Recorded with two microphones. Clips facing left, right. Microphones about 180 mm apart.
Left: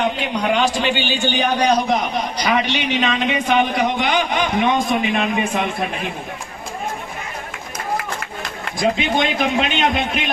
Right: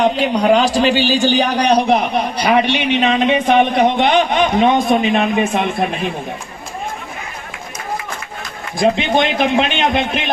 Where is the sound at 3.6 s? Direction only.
25° right (ahead or behind).